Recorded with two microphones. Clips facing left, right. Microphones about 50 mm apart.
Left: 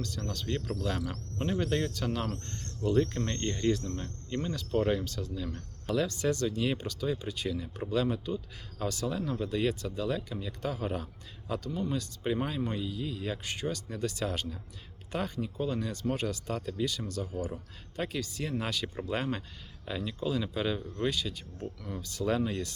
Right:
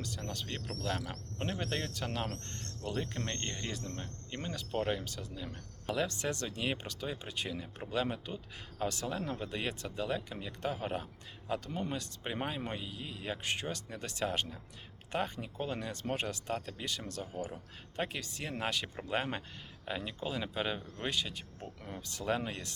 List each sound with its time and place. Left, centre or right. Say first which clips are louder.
0.0 s speech: left 4 dB; right
5.0 s speech: left 6 dB; centre